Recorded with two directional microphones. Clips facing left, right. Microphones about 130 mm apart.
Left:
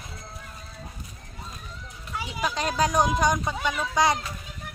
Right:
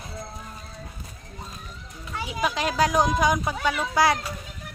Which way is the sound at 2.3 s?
5° right (ahead or behind).